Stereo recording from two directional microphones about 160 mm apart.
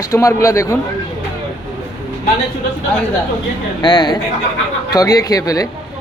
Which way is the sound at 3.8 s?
30° left (ahead or behind).